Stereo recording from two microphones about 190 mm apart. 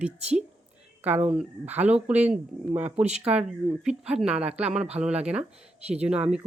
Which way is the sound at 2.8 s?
35° right (ahead or behind).